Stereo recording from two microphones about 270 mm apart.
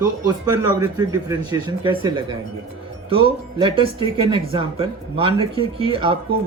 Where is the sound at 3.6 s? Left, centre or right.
Centre.